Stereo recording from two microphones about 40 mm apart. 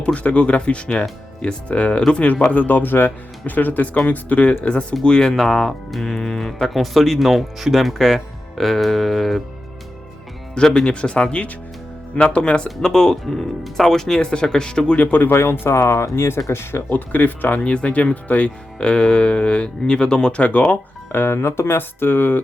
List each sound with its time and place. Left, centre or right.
0.0 s speech: left
4.6 s speech: left
5.5 s speech: centre
6.7 s speech: centre
10.5 s speech: centre
12.8 s speech: centre
14.2 s speech: left
14.9 s speech: left
15.3 s speech: left
16.9 s speech: left
17.6 s speech: left
18.8 s speech: left
20.4 s speech: left
21.1 s speech: left